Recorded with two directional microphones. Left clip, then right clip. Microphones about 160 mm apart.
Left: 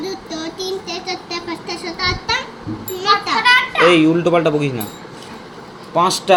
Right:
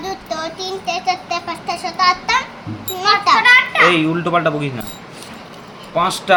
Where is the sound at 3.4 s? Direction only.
5° left (ahead or behind).